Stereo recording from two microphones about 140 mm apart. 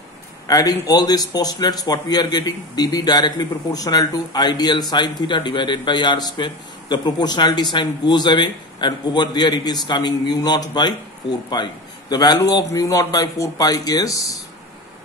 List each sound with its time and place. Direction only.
0.5 s a man's voice: 25° left (ahead or behind)